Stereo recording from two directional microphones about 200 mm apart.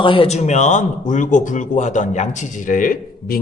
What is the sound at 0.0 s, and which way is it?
A woman's voice, 25° left (ahead or behind).